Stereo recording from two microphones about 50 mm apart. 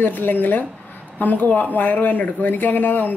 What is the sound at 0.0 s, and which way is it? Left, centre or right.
Speech, left.